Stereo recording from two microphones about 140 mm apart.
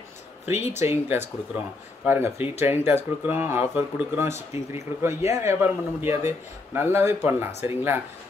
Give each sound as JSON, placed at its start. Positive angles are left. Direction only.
{"t": 0.5, "sound": "speech", "side_deg": 50}
{"t": 0.8, "sound": "a man's voice", "side_deg": -15}